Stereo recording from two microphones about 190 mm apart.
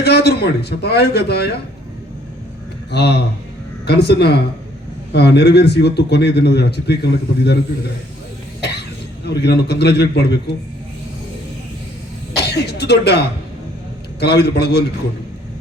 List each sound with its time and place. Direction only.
0.0 s a man's voice: 60° left (ahead or behind)
2.9 s a man's voice: 60° left (ahead or behind)
9.2 s a man's voice: 60° left (ahead or behind)
12.3 s a man's voice: 60° left (ahead or behind)